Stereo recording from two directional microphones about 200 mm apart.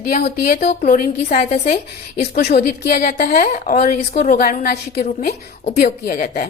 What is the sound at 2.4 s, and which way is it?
A woman's voice, 50° left (ahead or behind).